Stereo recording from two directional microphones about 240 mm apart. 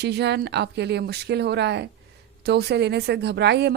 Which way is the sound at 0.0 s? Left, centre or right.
Right.